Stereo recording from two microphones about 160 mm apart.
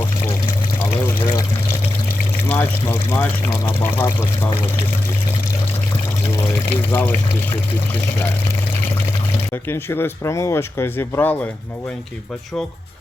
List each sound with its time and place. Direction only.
0.8 s pour: 15° left (ahead or behind)
2.5 s speech: 15° left (ahead or behind)
6.3 s speech: 15° left (ahead or behind)
9.5 s speech: 15° left (ahead or behind)